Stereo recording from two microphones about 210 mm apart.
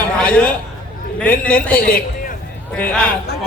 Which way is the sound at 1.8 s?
45° left (ahead or behind).